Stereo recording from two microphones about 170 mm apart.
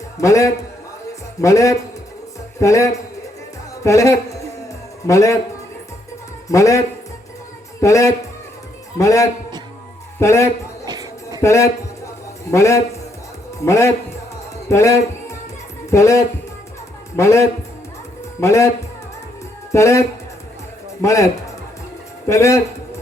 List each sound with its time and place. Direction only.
0.2 s a man's voice: 20° left (ahead or behind)
6.5 s a man's voice: 20° left (ahead or behind)
10.8 s music: 20° right (ahead or behind)
11.4 s music: 15° left (ahead or behind)
13.6 s speech: 15° left (ahead or behind)
19.7 s a man's voice: 15° left (ahead or behind)
22.3 s speech: 15° left (ahead or behind)